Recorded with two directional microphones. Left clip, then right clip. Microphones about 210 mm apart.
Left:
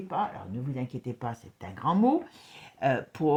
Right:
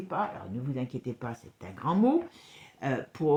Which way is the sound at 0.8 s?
40° left (ahead or behind).